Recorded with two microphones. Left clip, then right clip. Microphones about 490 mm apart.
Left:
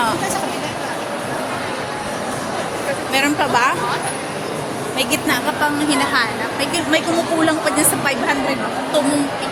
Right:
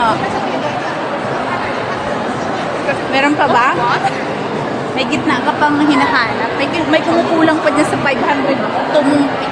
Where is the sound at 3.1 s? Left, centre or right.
Left.